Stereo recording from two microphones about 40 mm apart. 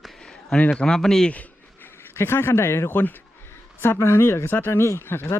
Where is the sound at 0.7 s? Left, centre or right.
Left.